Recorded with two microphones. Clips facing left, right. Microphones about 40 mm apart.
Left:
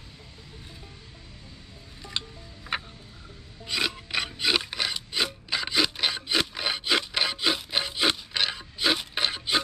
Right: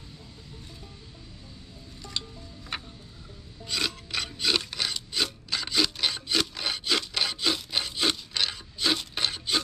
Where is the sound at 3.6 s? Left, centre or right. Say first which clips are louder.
Left 2 dB; centre.